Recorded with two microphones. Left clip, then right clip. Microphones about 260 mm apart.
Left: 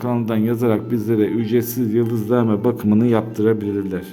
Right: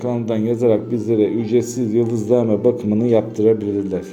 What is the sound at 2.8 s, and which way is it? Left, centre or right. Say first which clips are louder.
Speech: right 1 dB; centre.